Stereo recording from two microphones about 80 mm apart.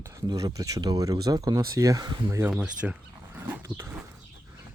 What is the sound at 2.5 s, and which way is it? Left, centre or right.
Speech, centre.